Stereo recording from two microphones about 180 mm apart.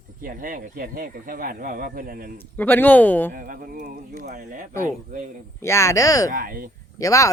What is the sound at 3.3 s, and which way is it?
Speech, 50° right (ahead or behind).